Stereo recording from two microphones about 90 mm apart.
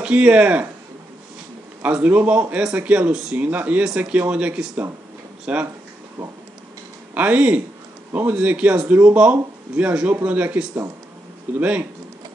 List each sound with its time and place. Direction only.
0.0 s speech: 10° right (ahead or behind)
1.8 s speech: 15° right (ahead or behind)
7.2 s speech: 15° right (ahead or behind)